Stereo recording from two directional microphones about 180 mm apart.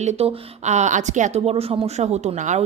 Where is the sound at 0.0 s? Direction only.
35° right (ahead or behind).